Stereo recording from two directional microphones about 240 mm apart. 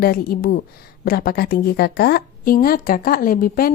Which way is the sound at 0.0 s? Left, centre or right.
Left.